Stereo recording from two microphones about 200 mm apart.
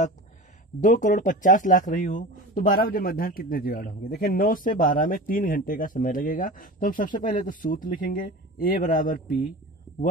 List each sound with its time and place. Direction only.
0.7 s speech: 40° left (ahead or behind)